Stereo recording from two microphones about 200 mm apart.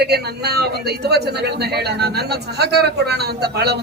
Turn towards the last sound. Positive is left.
turn(degrees=-55)  # may be behind; listen again after turning